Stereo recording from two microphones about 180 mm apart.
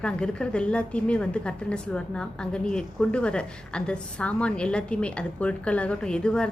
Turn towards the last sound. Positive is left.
turn(degrees=5)  # may be behind; listen again after turning